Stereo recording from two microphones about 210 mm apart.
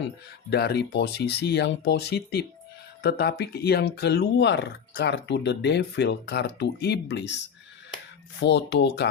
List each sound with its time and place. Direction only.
0.5 s speech: 50° left (ahead or behind)
8.4 s speech: 55° left (ahead or behind)